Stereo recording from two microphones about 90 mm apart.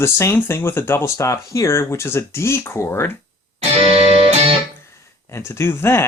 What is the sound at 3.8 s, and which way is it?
Music, 90° right.